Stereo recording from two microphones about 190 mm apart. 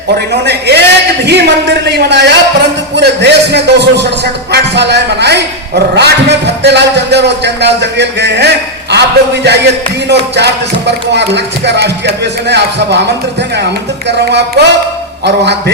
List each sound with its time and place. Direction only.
0.4 s a man's voice: 60° right (ahead or behind)
14.1 s a man's voice: 60° right (ahead or behind)